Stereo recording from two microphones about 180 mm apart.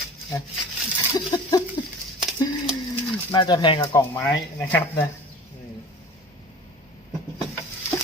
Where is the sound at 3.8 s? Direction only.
15° left (ahead or behind).